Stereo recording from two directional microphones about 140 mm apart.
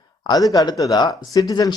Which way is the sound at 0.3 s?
25° left (ahead or behind).